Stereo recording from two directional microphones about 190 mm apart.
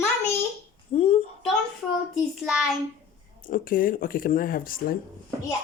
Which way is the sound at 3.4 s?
45° left (ahead or behind).